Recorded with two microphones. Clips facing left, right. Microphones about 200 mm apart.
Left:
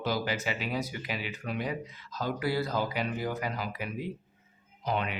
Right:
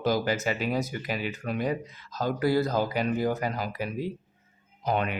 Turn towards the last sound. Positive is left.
turn(degrees=-50)  # may be behind; listen again after turning